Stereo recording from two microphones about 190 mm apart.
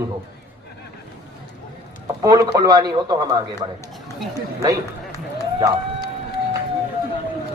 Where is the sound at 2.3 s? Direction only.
20° right (ahead or behind).